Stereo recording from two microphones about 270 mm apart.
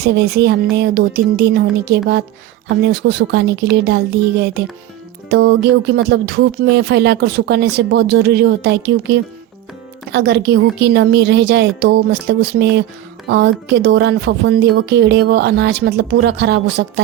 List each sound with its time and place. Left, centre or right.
0.0 s speech: right